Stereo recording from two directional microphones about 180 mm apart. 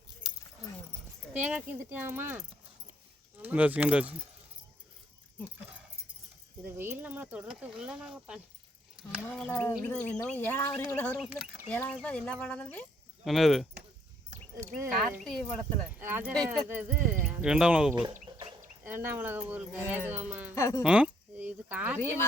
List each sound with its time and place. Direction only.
1.3 s speech: 10° right (ahead or behind)
5.5 s speech: 5° right (ahead or behind)
14.3 s a sound: 45° right (ahead or behind)
14.8 s speech: centre (ahead or behind)
15.9 s speech: 10° right (ahead or behind)
18.3 s bird: 25° right (ahead or behind)
18.8 s speech: 10° right (ahead or behind)
20.6 s speech: 15° left (ahead or behind)
20.8 s speech: 5° right (ahead or behind)